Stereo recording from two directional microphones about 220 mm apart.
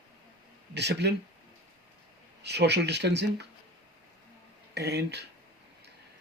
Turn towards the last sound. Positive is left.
turn(degrees=-50)  # may be behind; listen again after turning